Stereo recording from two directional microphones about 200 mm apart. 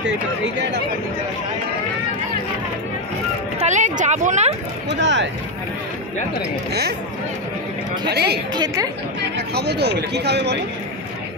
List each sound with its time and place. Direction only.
0.6 s speech: 55° right (ahead or behind)
3.5 s speech: 35° right (ahead or behind)
5.0 s speech: 65° right (ahead or behind)
8.1 s a woman's voice: 55° right (ahead or behind)
8.5 s a woman's voice: 20° right (ahead or behind)
9.5 s speech: 55° right (ahead or behind)